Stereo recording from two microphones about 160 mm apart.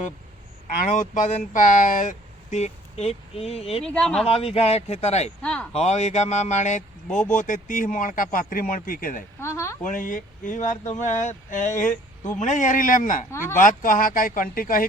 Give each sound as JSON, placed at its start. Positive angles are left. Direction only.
{"t": 0.9, "sound": "speech", "side_deg": 50}
{"t": 3.8, "sound": "speech", "side_deg": 5}
{"t": 4.3, "sound": "speech", "side_deg": 40}
{"t": 5.4, "sound": "a sound", "side_deg": 5}
{"t": 5.7, "sound": "speech", "side_deg": 40}
{"t": 9.4, "sound": "speech", "side_deg": 15}
{"t": 9.8, "sound": "speech", "side_deg": 55}